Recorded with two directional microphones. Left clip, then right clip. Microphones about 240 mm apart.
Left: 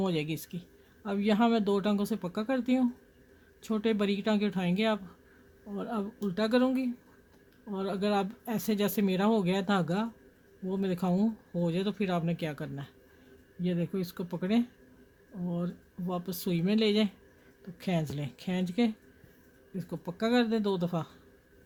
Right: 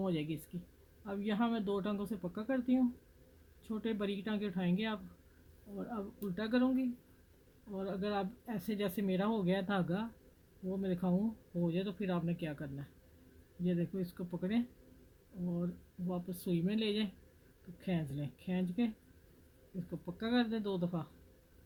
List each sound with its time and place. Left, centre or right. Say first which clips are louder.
0.0 s speech: left 6 dB; left
20.1 s speech: left 8 dB; left